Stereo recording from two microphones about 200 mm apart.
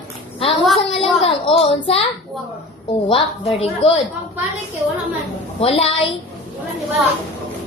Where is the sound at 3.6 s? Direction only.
25° left (ahead or behind).